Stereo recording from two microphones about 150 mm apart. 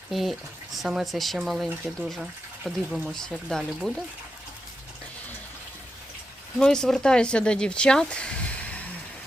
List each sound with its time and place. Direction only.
0.1 s speech: centre (ahead or behind)
6.6 s speech: 5° left (ahead or behind)